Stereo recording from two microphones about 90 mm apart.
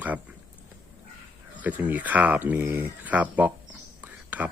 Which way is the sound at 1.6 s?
15° right (ahead or behind).